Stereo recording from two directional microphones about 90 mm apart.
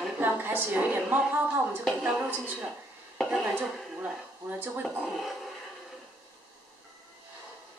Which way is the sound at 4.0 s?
20° right (ahead or behind).